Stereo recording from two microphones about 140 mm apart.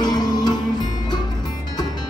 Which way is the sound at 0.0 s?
30° left (ahead or behind).